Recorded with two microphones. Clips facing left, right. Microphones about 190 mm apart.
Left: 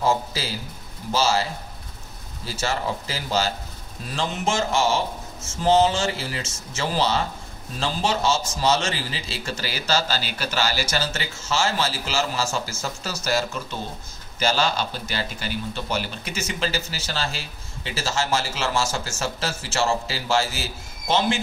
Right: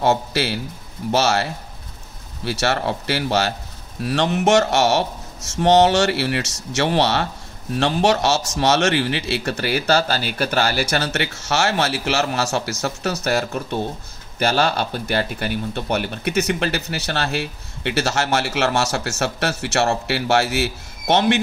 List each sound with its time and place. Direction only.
0.0 s a man's voice: 70° right (ahead or behind)